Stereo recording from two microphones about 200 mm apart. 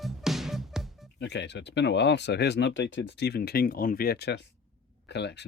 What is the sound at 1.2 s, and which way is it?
Speech, 60° left (ahead or behind).